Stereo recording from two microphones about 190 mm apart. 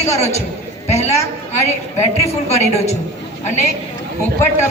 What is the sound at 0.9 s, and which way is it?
Speech, 35° left (ahead or behind).